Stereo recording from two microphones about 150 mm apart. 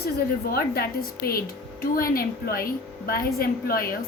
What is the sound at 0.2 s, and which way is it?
A woman's voice, 90° left.